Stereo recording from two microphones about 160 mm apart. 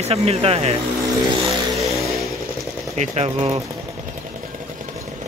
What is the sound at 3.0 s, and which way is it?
Speech, 40° right (ahead or behind).